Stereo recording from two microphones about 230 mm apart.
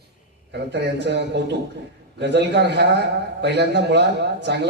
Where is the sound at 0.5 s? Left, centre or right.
Right.